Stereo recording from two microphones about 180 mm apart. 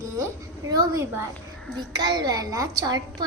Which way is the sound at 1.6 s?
5° left (ahead or behind).